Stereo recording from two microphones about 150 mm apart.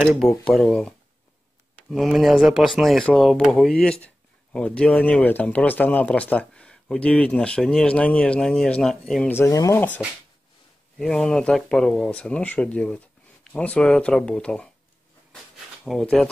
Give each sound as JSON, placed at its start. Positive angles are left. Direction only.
{"t": 0.0, "sound": "speech", "side_deg": 0}
{"t": 9.4, "sound": "speech", "side_deg": 20}
{"t": 11.0, "sound": "speech", "side_deg": 5}
{"t": 15.8, "sound": "speech", "side_deg": 5}